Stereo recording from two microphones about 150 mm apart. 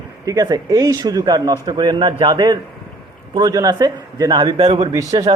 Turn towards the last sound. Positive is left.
turn(degrees=-25)  # may be behind; listen again after turning